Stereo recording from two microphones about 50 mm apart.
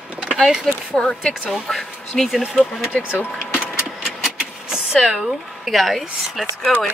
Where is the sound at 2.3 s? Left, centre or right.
Centre.